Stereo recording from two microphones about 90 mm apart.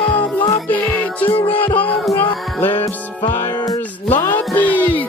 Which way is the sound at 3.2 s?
40° left (ahead or behind).